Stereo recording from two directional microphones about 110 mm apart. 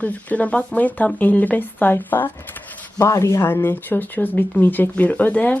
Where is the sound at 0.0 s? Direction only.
15° left (ahead or behind).